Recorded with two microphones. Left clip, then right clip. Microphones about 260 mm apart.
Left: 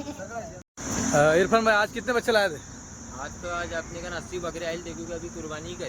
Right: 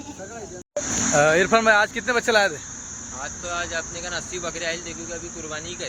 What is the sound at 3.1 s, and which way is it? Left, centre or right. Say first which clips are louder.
Speech: right 3 dB; centre.